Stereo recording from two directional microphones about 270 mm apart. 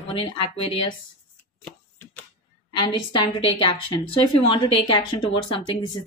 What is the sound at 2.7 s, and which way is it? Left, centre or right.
A woman's voice, centre.